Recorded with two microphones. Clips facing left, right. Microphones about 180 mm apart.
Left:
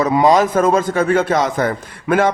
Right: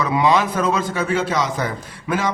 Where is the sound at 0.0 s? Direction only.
45° left (ahead or behind).